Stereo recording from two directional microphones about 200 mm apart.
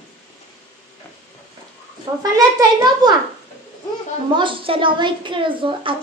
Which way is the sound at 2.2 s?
20° right (ahead or behind).